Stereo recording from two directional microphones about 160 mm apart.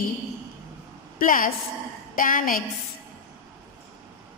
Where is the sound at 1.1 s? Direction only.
60° left (ahead or behind).